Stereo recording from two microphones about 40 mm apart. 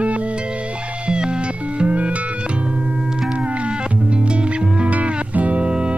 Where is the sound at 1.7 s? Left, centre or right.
Right.